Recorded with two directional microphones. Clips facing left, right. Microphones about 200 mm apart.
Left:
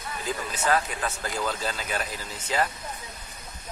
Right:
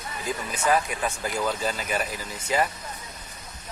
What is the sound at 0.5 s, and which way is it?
Speech, 10° right (ahead or behind).